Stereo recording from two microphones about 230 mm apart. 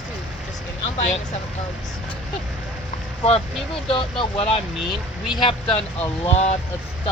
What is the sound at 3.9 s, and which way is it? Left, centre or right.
Speech, left.